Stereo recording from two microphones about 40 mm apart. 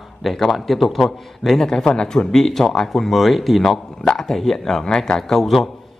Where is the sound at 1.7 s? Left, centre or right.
Centre.